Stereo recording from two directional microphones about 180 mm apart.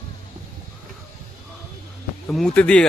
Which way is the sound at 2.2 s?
5° left (ahead or behind).